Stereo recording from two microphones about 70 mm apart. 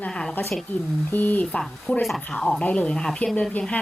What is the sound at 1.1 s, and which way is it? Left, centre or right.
A woman's voice, left.